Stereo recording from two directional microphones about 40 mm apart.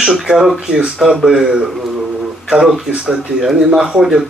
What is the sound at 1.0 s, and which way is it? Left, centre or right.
Speech, centre.